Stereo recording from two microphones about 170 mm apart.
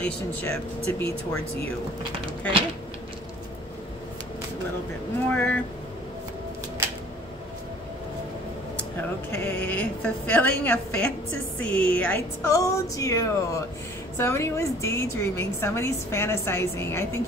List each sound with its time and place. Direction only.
0.0 s a woman's voice: 10° left (ahead or behind)
5.3 s a woman's voice: 10° left (ahead or behind)
9.3 s a woman's voice: 15° left (ahead or behind)